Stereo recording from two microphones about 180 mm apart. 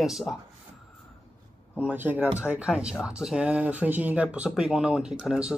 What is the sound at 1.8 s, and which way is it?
Speech, 10° right (ahead or behind).